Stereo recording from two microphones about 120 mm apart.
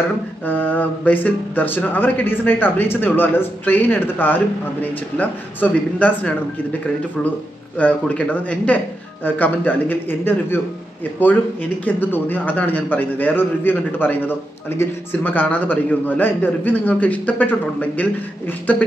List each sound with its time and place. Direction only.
0.5 s speech: 15° left (ahead or behind)
7.8 s speech: 10° left (ahead or behind)